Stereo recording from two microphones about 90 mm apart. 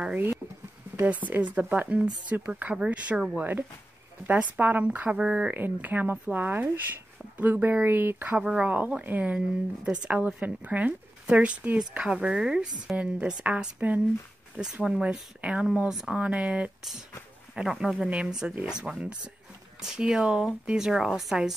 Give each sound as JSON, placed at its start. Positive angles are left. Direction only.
{"t": 0.0, "sound": "a woman's voice", "side_deg": -20}